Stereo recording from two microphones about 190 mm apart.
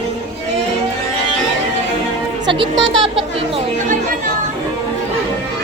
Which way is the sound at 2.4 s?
25° right (ahead or behind).